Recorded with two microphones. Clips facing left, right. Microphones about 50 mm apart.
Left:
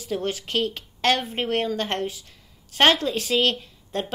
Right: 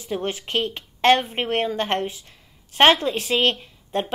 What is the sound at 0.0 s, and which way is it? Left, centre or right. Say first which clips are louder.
A woman's voice: even; right.